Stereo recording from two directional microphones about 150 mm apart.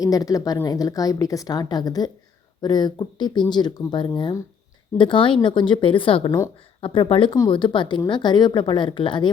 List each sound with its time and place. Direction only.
0.0 s a woman's voice: 25° left (ahead or behind)